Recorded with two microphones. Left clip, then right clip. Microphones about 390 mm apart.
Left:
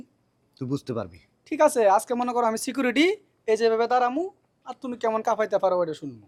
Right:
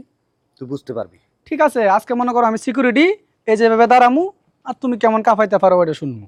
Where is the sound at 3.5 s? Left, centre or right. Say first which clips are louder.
Right 10 dB; right.